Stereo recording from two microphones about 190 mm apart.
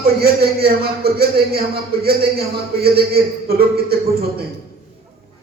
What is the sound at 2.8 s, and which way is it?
A man's voice, 55° right (ahead or behind).